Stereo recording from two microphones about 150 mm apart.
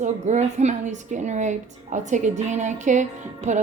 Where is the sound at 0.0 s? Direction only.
50° right (ahead or behind).